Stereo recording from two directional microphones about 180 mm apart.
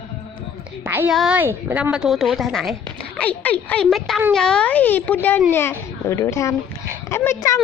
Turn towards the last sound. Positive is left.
turn(degrees=15)  # may be behind; listen again after turning